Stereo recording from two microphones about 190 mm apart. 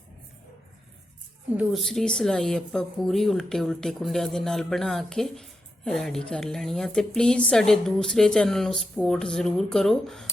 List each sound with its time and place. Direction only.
1.5 s speech: centre (ahead or behind)